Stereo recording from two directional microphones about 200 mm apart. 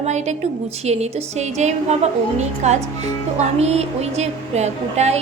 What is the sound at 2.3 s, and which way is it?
A woman's voice, 35° right (ahead or behind).